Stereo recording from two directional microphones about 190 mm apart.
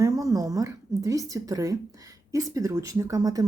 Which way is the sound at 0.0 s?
15° right (ahead or behind).